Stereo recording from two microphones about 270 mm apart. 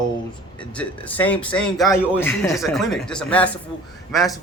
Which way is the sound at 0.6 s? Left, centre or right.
Centre.